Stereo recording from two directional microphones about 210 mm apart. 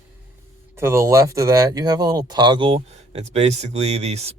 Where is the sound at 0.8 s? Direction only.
10° right (ahead or behind).